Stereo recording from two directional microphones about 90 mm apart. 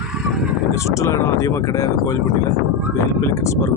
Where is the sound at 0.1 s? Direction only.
10° right (ahead or behind).